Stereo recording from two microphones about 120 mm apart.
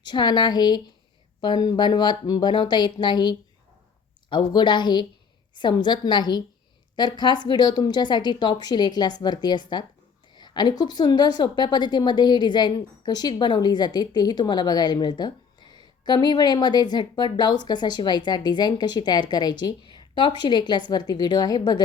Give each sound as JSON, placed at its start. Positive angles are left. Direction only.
{"t": 0.0, "sound": "a woman's voice", "side_deg": 35}